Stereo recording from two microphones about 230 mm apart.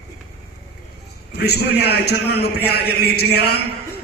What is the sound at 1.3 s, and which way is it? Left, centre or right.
A man's voice, left.